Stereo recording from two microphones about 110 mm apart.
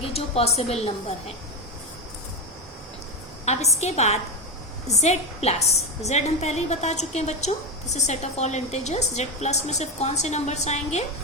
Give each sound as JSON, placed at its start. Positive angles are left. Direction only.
{"t": 0.0, "sound": "a woman's voice", "side_deg": 65}
{"t": 3.4, "sound": "a woman's voice", "side_deg": 90}
{"t": 4.9, "sound": "a woman's voice", "side_deg": 90}